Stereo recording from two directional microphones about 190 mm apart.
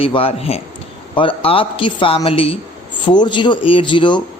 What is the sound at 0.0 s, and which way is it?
A man's voice, 30° left (ahead or behind).